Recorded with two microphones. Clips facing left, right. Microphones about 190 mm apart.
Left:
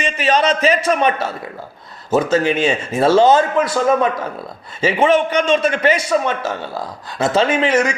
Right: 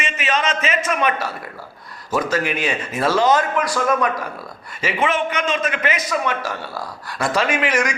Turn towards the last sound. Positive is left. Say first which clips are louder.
# left 5 dB
turn(degrees=25)  # may be behind; listen again after turning